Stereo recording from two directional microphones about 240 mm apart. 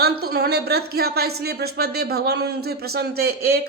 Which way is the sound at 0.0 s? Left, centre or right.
Right.